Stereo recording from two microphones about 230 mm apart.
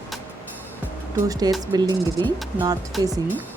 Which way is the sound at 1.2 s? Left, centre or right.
Centre.